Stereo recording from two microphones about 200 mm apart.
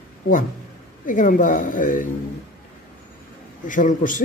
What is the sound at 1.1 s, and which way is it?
A man's voice, 40° left (ahead or behind).